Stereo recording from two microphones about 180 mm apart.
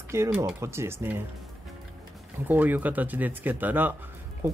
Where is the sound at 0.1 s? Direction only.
15° right (ahead or behind).